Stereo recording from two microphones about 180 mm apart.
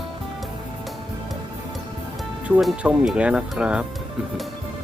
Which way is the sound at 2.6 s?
Centre (ahead or behind).